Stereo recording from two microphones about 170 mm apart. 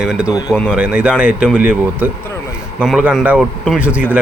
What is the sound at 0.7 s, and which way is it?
Mantra, 10° right (ahead or behind).